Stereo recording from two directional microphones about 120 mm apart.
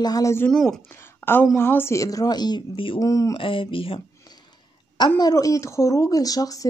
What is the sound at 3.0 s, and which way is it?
Speech, 30° left (ahead or behind).